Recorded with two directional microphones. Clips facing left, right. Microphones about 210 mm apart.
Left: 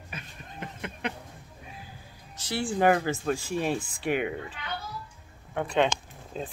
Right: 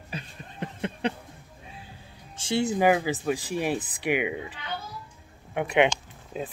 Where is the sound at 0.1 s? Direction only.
30° right (ahead or behind).